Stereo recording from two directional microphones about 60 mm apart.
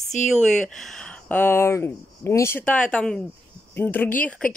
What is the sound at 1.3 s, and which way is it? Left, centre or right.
Speech, left.